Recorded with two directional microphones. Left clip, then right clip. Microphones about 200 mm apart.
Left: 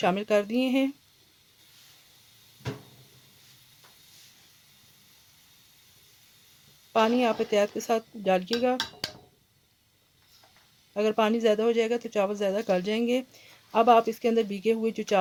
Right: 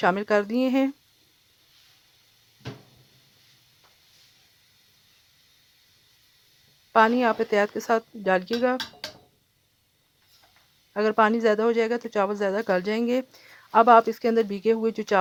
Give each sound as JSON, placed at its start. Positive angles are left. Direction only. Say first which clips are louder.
{"t": 0.0, "sound": "speech", "louder": "right 3 dB", "side_deg": -20}
{"t": 6.9, "sound": "speech", "louder": "right 4 dB", "side_deg": -20}
{"t": 10.9, "sound": "speech", "louder": "right 4 dB", "side_deg": -25}